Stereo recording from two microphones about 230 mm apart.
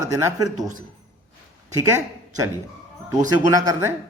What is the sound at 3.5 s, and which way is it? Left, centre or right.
Speech, centre.